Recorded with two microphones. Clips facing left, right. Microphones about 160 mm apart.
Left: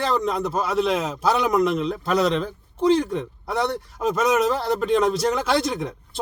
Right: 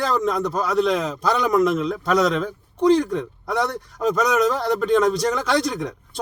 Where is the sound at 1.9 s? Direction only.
30° left (ahead or behind).